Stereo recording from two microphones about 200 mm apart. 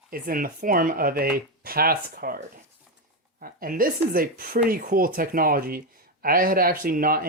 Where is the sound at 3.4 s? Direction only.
45° right (ahead or behind).